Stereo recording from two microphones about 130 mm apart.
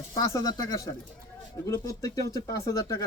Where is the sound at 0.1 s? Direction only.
25° left (ahead or behind).